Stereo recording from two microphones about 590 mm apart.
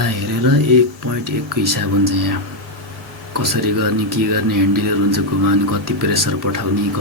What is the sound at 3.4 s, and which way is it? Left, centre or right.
Speech, right.